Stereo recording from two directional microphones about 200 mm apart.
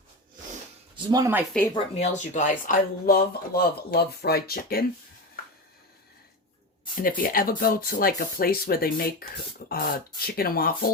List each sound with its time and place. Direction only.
1.1 s speech: 15° right (ahead or behind)
1.7 s speech: 35° left (ahead or behind); by 4.9 s 50° left (ahead or behind)
7.2 s speech: 45° left (ahead or behind)